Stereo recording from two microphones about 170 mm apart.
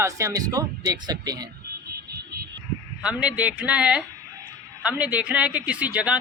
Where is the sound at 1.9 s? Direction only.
65° right (ahead or behind).